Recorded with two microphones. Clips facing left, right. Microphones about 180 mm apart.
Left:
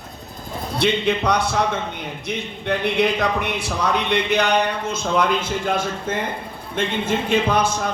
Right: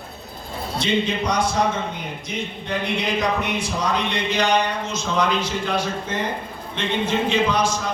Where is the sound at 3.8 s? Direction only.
60° left (ahead or behind).